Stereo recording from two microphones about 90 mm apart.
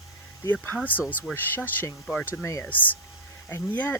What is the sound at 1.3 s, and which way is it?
Speech, 20° left (ahead or behind).